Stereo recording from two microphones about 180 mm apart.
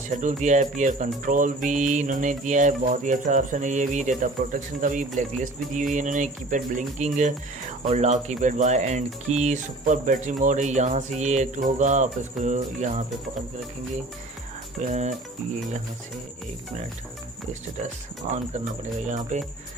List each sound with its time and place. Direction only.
0.1 s music: 45° right (ahead or behind)
7.9 s speech: 40° right (ahead or behind)
14.8 s speech: 40° right (ahead or behind)
19.0 s speech: 40° right (ahead or behind)